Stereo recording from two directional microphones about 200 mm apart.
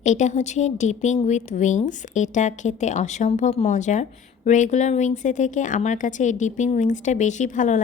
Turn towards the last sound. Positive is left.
turn(degrees=40)  # may be behind; listen again after turning